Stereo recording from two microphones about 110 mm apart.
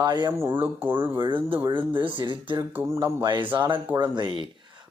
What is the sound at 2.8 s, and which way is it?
Speech, 25° right (ahead or behind).